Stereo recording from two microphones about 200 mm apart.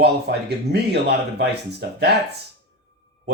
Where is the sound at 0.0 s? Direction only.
55° right (ahead or behind).